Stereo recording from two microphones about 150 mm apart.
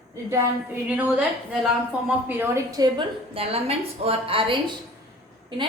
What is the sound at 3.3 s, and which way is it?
A woman's voice, 40° right (ahead or behind).